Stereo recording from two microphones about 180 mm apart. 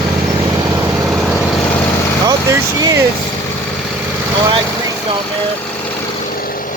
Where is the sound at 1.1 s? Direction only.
Centre (ahead or behind).